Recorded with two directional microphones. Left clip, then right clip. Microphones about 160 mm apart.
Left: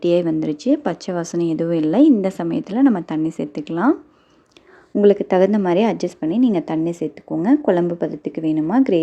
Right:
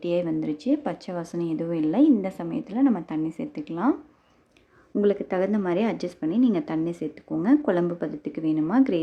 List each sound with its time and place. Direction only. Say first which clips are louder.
0.0 s speech: left 8 dB; 35° left (ahead or behind)
4.9 s a woman's voice: left 9 dB; 30° left (ahead or behind)